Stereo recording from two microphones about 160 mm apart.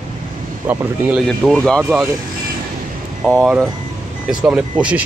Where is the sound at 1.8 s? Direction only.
5° right (ahead or behind).